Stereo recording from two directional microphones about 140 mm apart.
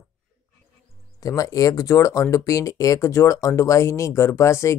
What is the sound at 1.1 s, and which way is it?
Speech, 25° left (ahead or behind).